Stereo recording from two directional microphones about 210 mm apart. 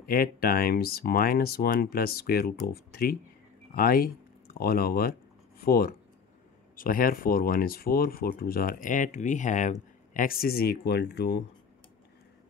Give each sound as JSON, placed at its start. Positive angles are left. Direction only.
{"t": 0.0, "sound": "speech", "side_deg": 45}